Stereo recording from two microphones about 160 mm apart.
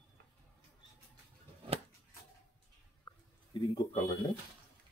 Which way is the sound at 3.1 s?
30° left (ahead or behind).